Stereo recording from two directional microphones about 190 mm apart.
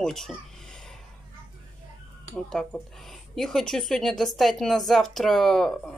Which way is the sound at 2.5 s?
Centre (ahead or behind).